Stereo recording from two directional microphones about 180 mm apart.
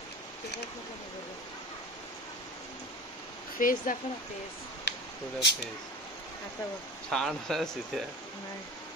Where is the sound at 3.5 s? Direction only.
50° left (ahead or behind).